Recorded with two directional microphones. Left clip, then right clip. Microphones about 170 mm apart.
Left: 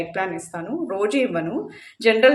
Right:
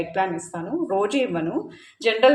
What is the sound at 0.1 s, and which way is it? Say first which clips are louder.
A woman's voice: right 2 dB; 20° left (ahead or behind).